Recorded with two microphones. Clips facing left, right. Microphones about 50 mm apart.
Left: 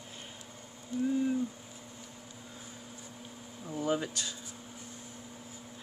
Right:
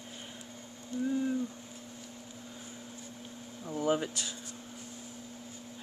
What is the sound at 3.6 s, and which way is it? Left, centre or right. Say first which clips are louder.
Air conditioning: right 2 dB; centre.